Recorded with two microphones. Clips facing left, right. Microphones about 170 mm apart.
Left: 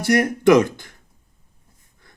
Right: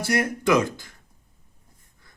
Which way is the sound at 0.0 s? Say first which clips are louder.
Left 7 dB; 55° left (ahead or behind).